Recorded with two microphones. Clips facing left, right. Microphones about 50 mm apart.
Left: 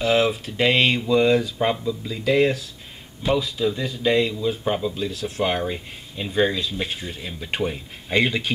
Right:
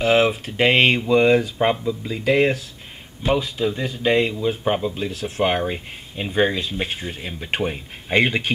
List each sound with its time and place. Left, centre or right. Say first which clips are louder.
0.0 s speech: right 2 dB; right